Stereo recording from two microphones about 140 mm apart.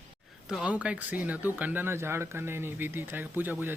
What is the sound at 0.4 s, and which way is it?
Speech, 5° right (ahead or behind).